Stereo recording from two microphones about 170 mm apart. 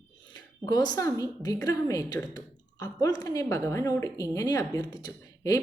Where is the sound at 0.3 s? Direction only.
25° left (ahead or behind).